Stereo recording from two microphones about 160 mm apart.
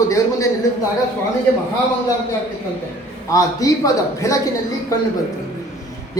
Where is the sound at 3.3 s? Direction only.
20° left (ahead or behind).